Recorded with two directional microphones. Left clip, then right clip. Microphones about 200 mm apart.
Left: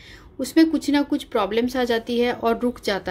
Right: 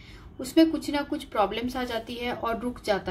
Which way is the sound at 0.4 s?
45° left (ahead or behind).